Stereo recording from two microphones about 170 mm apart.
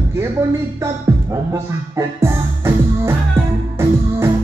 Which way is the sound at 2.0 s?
15° right (ahead or behind).